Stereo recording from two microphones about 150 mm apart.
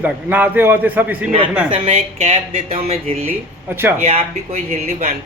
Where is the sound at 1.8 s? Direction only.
50° right (ahead or behind).